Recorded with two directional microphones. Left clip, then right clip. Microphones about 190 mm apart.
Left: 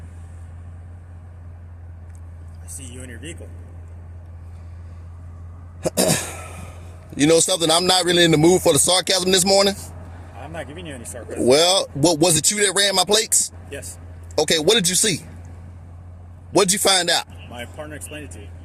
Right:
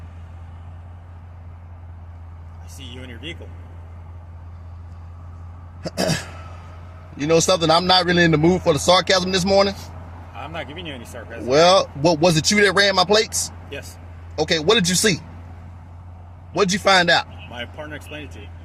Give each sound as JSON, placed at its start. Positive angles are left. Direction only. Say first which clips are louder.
{"t": 2.7, "sound": "speech", "louder": "right 1 dB", "side_deg": 10}
{"t": 5.8, "sound": "a sound", "louder": "left 3 dB", "side_deg": 45}
{"t": 7.2, "sound": "speech", "louder": "left 1 dB", "side_deg": 55}
{"t": 10.3, "sound": "speech", "louder": "right 2 dB", "side_deg": 10}
{"t": 11.4, "sound": "speech", "louder": "right 2 dB", "side_deg": 55}
{"t": 13.7, "sound": "speech", "louder": "right 1 dB", "side_deg": 0}
{"t": 14.3, "sound": "speech", "louder": "left 1 dB", "side_deg": 55}
{"t": 16.6, "sound": "speech", "louder": "right 1 dB", "side_deg": 55}
{"t": 17.5, "sound": "speech", "louder": "right 2 dB", "side_deg": 0}